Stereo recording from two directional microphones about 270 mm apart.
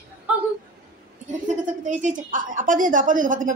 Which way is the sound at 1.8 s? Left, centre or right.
Right.